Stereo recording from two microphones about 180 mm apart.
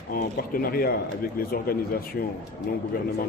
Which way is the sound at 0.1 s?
55° left (ahead or behind).